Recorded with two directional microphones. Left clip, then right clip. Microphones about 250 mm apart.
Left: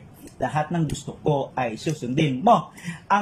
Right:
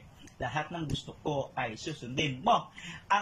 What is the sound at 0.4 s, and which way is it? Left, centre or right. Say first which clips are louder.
Speech: left 9 dB; centre.